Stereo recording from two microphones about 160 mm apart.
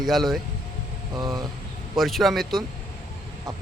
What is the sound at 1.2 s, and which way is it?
Speech, 25° right (ahead or behind).